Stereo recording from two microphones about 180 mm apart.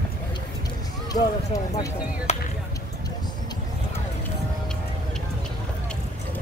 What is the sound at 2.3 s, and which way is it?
Speech, 40° left (ahead or behind).